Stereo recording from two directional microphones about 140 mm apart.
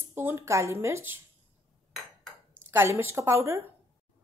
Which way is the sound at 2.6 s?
15° right (ahead or behind).